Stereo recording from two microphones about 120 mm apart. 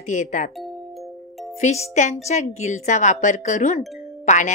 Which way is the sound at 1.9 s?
75° left (ahead or behind).